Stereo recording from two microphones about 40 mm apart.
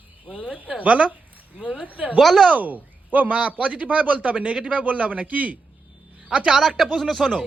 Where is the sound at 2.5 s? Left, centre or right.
Right.